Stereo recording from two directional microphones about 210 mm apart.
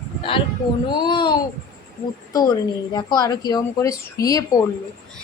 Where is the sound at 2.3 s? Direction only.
20° left (ahead or behind).